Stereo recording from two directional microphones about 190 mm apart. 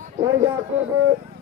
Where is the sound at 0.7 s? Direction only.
10° right (ahead or behind).